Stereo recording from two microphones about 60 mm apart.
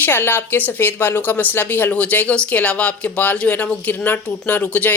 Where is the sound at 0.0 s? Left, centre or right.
Left.